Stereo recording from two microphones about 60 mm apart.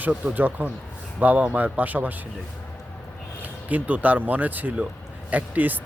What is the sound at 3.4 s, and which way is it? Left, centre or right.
Speech, right.